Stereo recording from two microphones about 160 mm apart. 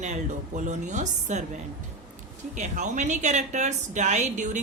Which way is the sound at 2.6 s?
50° right (ahead or behind).